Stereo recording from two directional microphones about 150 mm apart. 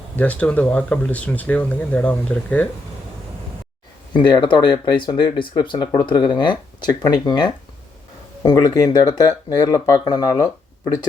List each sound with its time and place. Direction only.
0.2 s speech: 10° left (ahead or behind)
4.1 s speech: 30° left (ahead or behind)